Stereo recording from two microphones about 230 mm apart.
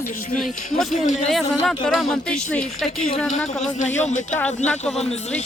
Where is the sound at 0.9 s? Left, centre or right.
Left.